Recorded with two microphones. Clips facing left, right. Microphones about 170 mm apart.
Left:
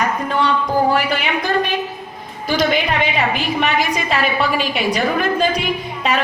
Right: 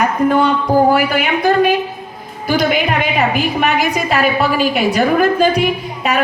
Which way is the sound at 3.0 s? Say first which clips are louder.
Right 3 dB; 45° right (ahead or behind).